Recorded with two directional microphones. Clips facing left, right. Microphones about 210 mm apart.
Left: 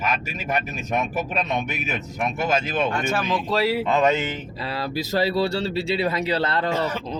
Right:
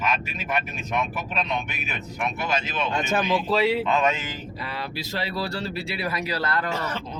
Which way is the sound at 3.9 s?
35° left (ahead or behind).